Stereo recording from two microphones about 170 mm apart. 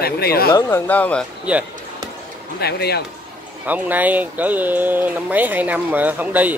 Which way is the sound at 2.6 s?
70° left (ahead or behind).